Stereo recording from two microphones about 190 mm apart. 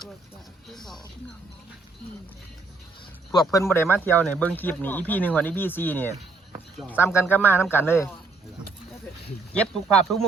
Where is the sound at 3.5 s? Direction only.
15° left (ahead or behind).